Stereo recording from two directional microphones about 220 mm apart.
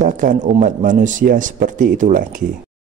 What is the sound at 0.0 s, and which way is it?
Speech, 35° right (ahead or behind).